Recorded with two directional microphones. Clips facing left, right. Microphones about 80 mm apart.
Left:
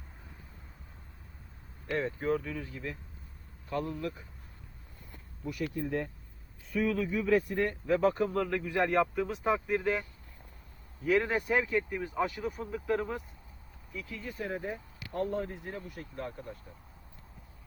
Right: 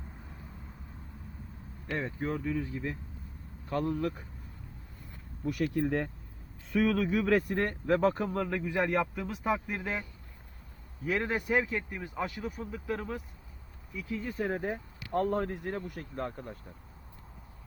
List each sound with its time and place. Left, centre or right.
2.0 s speech: centre
3.7 s speech: right
5.5 s speech: right
8.4 s speech: centre
8.9 s speech: centre
11.0 s speech: centre
14.1 s speech: right
14.3 s speech: right